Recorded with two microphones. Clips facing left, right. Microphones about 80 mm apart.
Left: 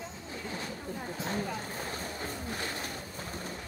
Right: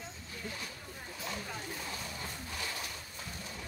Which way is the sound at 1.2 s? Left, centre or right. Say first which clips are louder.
Left 5 dB; left.